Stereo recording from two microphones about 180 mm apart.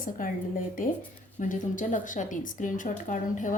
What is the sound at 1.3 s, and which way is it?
Speech, 45° left (ahead or behind).